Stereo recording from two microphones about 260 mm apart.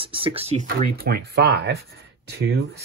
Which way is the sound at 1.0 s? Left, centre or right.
Right.